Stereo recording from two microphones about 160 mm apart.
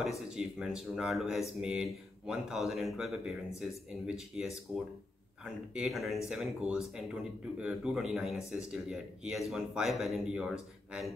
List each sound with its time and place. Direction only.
0.3 s speech: 5° right (ahead or behind)